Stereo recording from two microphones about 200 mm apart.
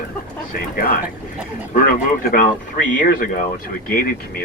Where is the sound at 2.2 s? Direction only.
45° left (ahead or behind).